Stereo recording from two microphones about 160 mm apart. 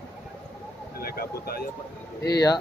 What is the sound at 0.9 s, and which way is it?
Vehicle, 70° left (ahead or behind).